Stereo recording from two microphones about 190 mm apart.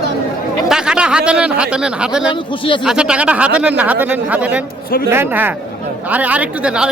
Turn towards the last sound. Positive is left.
turn(degrees=-5)  # may be behind; listen again after turning